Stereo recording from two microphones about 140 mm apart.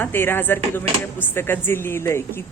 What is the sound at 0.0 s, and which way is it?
Speech, 15° left (ahead or behind).